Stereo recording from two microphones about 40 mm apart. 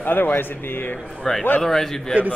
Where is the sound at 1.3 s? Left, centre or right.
Centre.